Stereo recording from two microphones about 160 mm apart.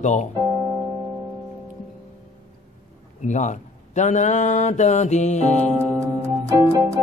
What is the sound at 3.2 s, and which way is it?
Speech, 50° left (ahead or behind).